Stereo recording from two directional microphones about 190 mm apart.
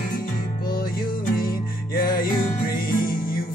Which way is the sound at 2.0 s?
50° left (ahead or behind).